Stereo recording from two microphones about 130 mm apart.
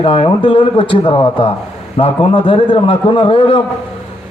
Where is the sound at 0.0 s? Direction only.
45° left (ahead or behind).